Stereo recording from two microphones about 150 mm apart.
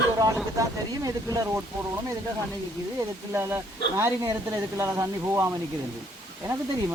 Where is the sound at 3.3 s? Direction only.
15° right (ahead or behind).